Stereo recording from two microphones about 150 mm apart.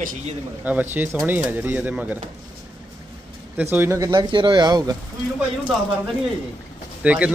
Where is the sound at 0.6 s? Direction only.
10° right (ahead or behind).